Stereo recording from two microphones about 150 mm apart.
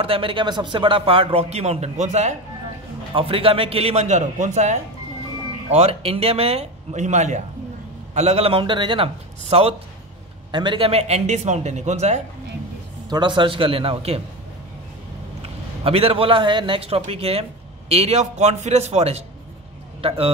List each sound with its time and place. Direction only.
0.0 s a man's voice: 35° right (ahead or behind)
3.2 s a man's voice: 35° right (ahead or behind); by 4.7 s 55° right (ahead or behind)
5.7 s a man's voice: 45° right (ahead or behind)
13.1 s a man's voice: 30° right (ahead or behind)
15.4 s a man's voice: 40° right (ahead or behind)